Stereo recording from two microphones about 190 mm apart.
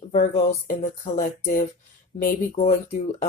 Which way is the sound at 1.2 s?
50° left (ahead or behind).